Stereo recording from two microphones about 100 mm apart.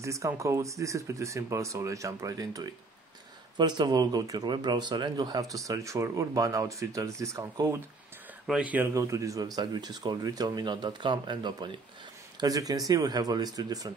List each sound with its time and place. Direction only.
0.0 s speech: 30° right (ahead or behind)
8.5 s speech: 10° right (ahead or behind)
8.8 s speech: 30° right (ahead or behind); by 11.7 s 50° right (ahead or behind)
12.4 s speech: 40° right (ahead or behind)